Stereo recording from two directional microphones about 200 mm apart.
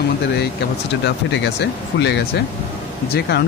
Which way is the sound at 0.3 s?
60° left (ahead or behind).